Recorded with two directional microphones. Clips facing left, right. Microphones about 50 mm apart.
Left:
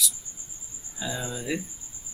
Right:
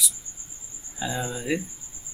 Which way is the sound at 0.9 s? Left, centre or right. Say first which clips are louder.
Right 3 dB; centre.